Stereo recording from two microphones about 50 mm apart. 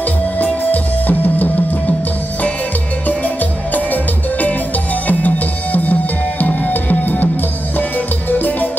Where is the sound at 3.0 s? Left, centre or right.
Left.